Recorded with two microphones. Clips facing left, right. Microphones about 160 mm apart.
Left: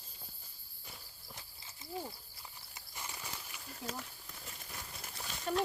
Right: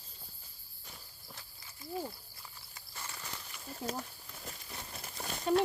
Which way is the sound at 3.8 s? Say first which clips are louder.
Right 5 dB; 35° right (ahead or behind).